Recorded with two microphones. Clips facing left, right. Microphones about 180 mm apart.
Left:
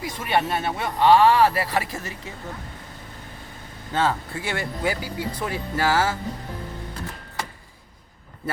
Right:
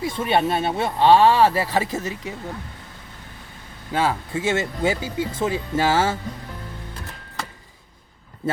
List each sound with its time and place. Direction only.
0.0 s speech: 25° right (ahead or behind)
3.9 s speech: 15° right (ahead or behind)